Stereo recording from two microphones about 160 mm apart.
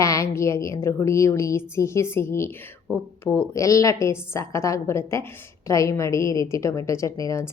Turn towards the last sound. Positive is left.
turn(degrees=20)  # may be behind; listen again after turning